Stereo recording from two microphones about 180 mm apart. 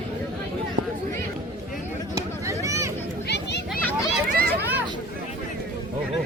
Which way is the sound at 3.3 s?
70° left (ahead or behind).